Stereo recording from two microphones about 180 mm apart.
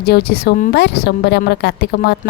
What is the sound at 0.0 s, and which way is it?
Speech, 60° left (ahead or behind).